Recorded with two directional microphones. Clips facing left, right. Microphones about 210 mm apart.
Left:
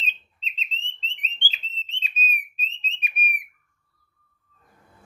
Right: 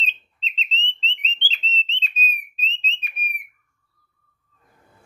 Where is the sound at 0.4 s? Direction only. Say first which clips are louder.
Right 5 dB; 50° left (ahead or behind).